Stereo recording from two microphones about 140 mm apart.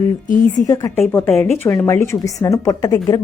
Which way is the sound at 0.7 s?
25° left (ahead or behind).